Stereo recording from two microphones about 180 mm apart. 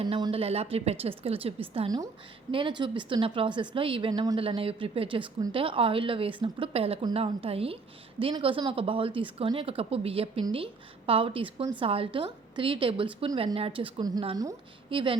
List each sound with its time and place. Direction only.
0.0 s a woman's voice: 30° right (ahead or behind)